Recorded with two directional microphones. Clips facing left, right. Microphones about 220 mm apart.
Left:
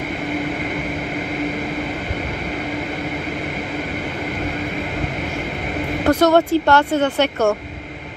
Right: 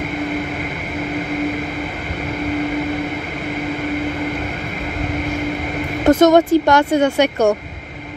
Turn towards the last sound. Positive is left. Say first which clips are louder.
# right 3 dB
turn(degrees=-15)  # may be behind; listen again after turning